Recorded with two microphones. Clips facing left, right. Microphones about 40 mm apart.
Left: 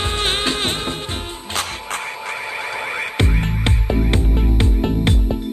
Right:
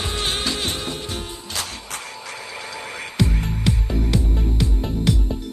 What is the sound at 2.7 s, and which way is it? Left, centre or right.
Music, left.